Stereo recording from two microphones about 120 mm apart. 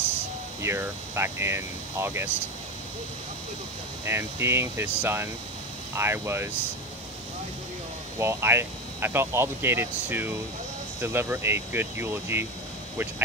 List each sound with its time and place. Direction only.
0.6 s speech: 20° right (ahead or behind)
4.0 s speech: 20° right (ahead or behind)
8.2 s speech: 20° right (ahead or behind)